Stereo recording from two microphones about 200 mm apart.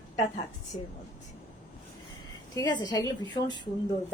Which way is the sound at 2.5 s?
20° left (ahead or behind).